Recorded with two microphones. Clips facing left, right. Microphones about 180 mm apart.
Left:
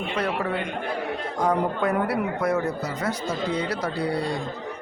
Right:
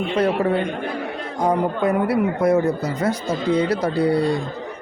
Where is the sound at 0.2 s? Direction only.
30° right (ahead or behind).